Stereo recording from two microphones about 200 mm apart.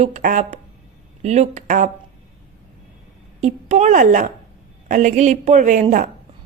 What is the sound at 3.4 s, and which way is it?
A woman's voice, 35° right (ahead or behind).